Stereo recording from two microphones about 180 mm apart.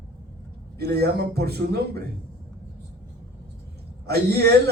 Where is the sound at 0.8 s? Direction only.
60° right (ahead or behind).